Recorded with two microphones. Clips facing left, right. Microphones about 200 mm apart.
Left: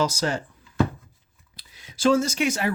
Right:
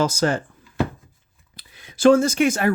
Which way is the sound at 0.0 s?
50° right (ahead or behind).